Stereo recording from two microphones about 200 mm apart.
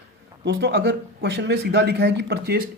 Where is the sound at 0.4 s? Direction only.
55° right (ahead or behind).